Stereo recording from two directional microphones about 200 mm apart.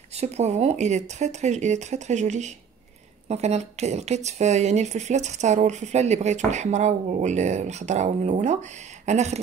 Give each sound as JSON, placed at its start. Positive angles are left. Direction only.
{"t": 0.1, "sound": "speech", "side_deg": -35}